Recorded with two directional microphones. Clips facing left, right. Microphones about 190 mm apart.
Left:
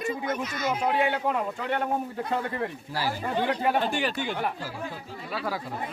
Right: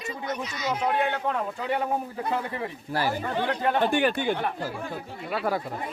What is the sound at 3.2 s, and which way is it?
Speech, 10° left (ahead or behind).